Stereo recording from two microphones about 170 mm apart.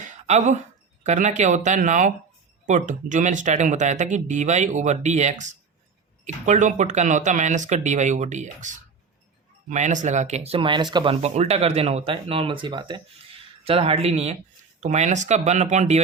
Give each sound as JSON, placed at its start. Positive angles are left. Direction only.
{"t": 0.3, "sound": "speech", "side_deg": -40}